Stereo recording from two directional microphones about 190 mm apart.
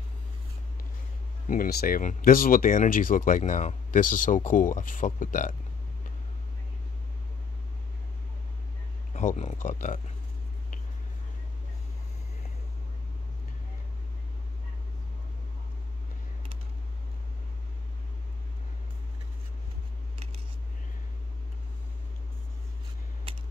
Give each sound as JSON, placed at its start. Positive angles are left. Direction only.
{"t": 1.5, "sound": "speech", "side_deg": 50}
{"t": 9.1, "sound": "speech", "side_deg": 40}